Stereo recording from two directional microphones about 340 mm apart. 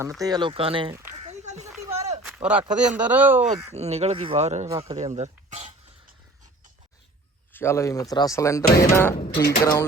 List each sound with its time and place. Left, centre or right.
0.0 s speech: centre
1.1 s a sound: centre
2.2 s speech: centre
3.7 s speech: centre
7.5 s speech: centre
9.1 s mechanisms: left